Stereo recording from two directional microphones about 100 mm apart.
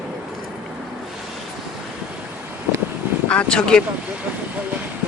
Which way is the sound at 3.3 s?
10° left (ahead or behind).